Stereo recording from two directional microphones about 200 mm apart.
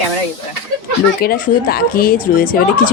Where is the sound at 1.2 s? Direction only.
45° left (ahead or behind).